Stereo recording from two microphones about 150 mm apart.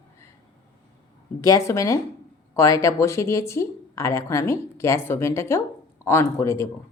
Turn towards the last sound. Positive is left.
turn(degrees=20)  # may be behind; listen again after turning